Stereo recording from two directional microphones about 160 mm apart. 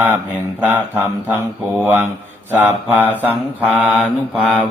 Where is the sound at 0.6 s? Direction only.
10° right (ahead or behind).